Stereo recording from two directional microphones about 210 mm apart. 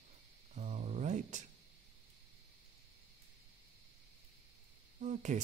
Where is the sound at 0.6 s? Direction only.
35° right (ahead or behind).